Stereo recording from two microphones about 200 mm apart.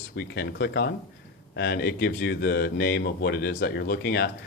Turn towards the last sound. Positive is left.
turn(degrees=55)  # may be behind; listen again after turning